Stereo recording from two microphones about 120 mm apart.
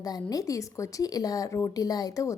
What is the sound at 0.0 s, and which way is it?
A woman's voice, 30° left (ahead or behind).